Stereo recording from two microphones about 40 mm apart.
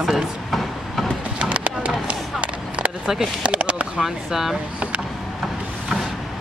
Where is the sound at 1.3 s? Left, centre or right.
Right.